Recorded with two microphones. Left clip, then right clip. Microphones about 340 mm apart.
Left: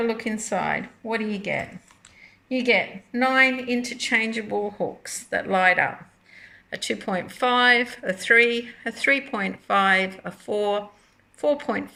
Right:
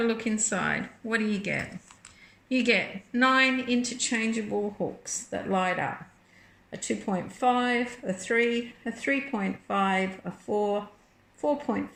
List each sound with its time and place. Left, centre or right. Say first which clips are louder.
0.0 s speech: left 2 dB; centre
2.5 s speech: left 4 dB; centre
4.4 s speech: left 4 dB; left
5.0 s a woman's voice: left 6 dB; left